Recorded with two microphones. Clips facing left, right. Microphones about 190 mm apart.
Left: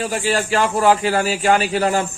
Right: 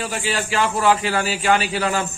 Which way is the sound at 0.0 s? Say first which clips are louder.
Left 4 dB; 45° left (ahead or behind).